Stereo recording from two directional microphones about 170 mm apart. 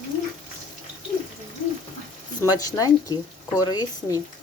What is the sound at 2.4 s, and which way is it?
Speech, 20° left (ahead or behind).